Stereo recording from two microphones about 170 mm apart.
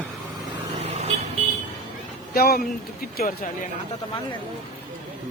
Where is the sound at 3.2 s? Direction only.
55° left (ahead or behind).